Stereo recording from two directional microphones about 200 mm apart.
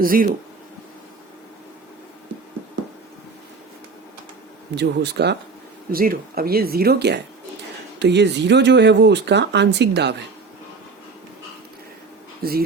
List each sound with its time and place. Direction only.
0.0 s speech: 45° right (ahead or behind)
4.7 s speech: 55° right (ahead or behind)
12.4 s speech: 50° right (ahead or behind)